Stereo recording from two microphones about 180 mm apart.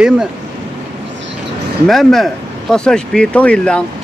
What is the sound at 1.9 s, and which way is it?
Speech, centre (ahead or behind).